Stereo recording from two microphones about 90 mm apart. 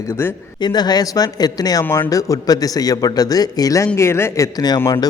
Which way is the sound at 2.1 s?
40° left (ahead or behind).